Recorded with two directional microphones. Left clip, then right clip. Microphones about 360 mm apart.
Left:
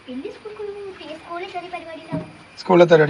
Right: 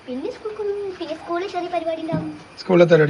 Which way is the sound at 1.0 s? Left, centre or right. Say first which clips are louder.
Right 6 dB; centre.